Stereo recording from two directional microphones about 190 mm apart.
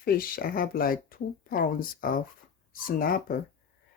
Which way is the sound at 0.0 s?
50° left (ahead or behind).